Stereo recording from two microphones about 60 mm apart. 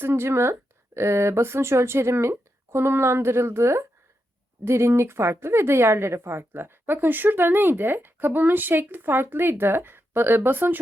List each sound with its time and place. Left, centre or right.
0.0 s a woman's voice: right